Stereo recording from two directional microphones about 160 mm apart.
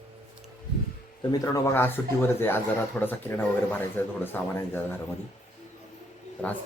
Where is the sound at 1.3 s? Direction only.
20° left (ahead or behind).